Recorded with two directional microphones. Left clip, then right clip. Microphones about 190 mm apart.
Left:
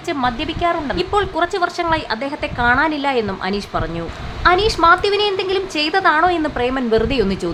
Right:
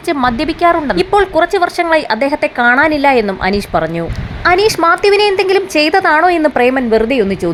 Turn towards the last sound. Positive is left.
turn(degrees=-15)  # may be behind; listen again after turning